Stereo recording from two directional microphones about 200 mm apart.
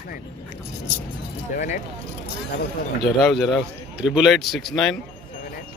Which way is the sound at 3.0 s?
Centre (ahead or behind).